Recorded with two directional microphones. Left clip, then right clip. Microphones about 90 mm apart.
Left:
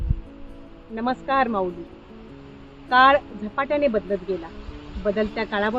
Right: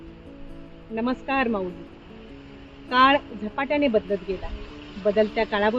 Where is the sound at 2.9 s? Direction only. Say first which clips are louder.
Left 3 dB; 25° left (ahead or behind).